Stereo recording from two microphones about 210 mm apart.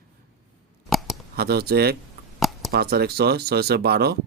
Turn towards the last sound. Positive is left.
turn(degrees=-50)  # may be behind; listen again after turning